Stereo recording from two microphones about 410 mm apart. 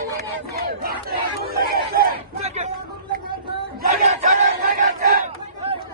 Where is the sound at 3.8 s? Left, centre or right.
Centre.